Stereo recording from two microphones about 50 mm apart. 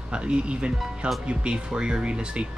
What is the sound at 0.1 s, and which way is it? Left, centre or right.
Speech, centre.